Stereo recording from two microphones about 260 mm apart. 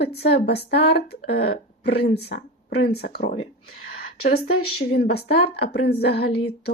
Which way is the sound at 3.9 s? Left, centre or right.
Left.